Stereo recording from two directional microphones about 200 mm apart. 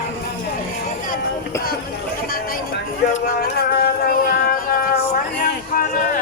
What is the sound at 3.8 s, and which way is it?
Music, 45° left (ahead or behind).